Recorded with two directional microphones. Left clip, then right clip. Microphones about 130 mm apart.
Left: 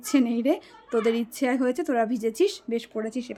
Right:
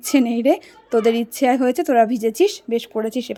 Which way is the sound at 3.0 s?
50° right (ahead or behind).